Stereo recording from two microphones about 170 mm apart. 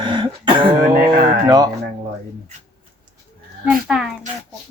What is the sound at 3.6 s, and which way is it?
Speech, 5° right (ahead or behind).